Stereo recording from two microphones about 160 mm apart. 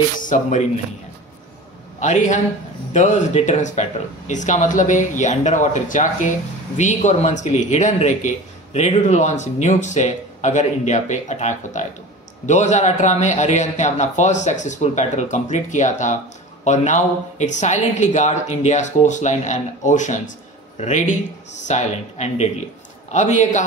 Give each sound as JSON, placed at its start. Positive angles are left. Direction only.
{"t": 0.2, "sound": "speech", "side_deg": 50}
{"t": 2.0, "sound": "a man's voice", "side_deg": 50}